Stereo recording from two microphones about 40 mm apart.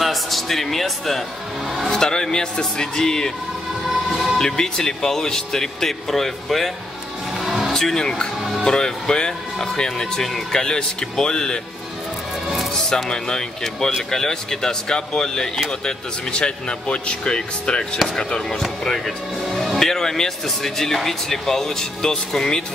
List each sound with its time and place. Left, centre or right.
0.0 s speech: centre
1.9 s speech: centre
4.4 s speech: centre
7.7 s speech: centre
12.7 s speech: centre
19.8 s speech: centre